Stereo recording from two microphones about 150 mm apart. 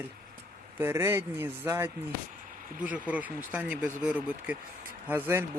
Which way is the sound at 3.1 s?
10° right (ahead or behind).